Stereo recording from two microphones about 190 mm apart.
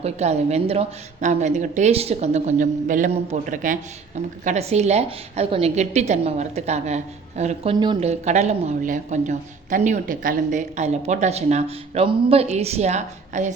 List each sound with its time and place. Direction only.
0.0 s a woman's voice: 35° right (ahead or behind)
8.0 s a woman's voice: 35° right (ahead or behind)